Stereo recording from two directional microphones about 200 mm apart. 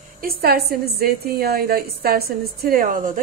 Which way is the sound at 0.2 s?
50° right (ahead or behind).